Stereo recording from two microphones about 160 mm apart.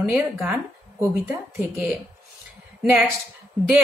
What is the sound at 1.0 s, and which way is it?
Speech, 15° right (ahead or behind).